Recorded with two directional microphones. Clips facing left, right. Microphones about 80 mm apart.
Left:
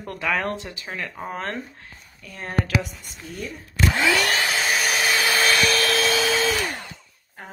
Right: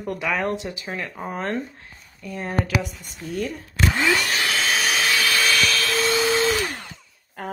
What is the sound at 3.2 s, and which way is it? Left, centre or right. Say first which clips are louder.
Speech: right 8 dB; right.